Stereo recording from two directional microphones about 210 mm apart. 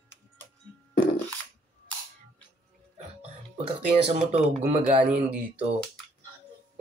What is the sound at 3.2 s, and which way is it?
Speech, 30° right (ahead or behind).